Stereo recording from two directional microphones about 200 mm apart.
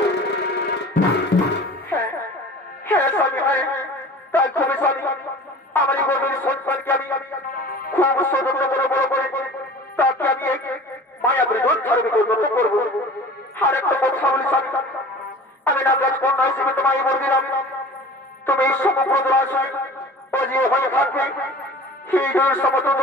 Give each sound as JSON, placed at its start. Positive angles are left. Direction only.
{"t": 0.3, "sound": "music", "side_deg": 55}
{"t": 1.9, "sound": "music", "side_deg": 10}
{"t": 2.9, "sound": "a sound", "side_deg": 10}
{"t": 4.3, "sound": "music", "side_deg": 10}
{"t": 7.5, "sound": "music", "side_deg": 45}
{"t": 7.9, "sound": "music", "side_deg": 10}
{"t": 9.9, "sound": "radio", "side_deg": 10}
{"t": 11.2, "sound": "a sound", "side_deg": 10}
{"t": 13.6, "sound": "music", "side_deg": 10}
{"t": 18.4, "sound": "a man's voice", "side_deg": 10}